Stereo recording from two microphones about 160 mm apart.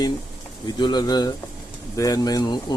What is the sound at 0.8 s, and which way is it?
Speech, 25° left (ahead or behind).